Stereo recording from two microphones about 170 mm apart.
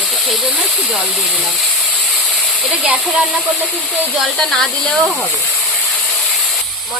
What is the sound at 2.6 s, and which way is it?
Speech, 5° right (ahead or behind).